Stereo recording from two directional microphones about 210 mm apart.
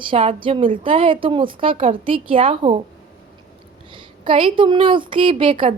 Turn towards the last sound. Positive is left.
turn(degrees=-25)  # may be behind; listen again after turning